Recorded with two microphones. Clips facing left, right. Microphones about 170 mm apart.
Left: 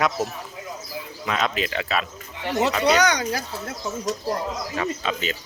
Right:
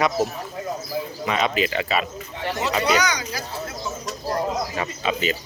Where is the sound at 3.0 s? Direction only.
55° left (ahead or behind).